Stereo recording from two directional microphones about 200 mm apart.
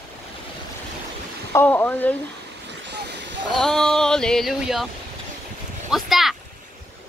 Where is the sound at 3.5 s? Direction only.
Centre (ahead or behind).